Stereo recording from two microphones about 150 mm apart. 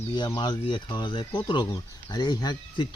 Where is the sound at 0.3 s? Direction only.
30° left (ahead or behind).